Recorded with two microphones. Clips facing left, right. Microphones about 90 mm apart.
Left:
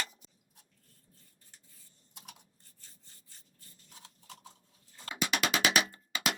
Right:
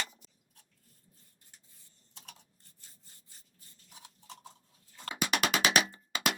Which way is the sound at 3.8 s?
15° right (ahead or behind).